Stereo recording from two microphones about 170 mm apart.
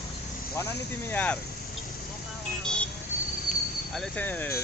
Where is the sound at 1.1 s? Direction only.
10° left (ahead or behind).